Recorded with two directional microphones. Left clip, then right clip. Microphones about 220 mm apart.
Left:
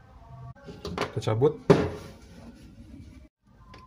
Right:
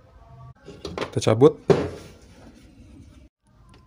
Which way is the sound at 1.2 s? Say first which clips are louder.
Right 9 dB; 45° right (ahead or behind).